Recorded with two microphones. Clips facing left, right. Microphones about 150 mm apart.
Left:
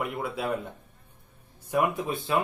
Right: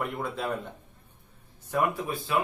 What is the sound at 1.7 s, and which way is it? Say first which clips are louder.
Speech: left 2 dB; 15° left (ahead or behind).